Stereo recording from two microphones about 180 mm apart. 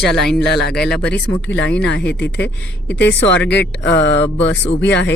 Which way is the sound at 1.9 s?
70° left (ahead or behind).